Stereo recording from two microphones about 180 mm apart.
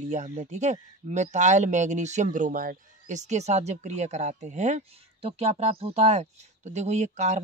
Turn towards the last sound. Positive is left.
turn(degrees=-40)  # may be behind; listen again after turning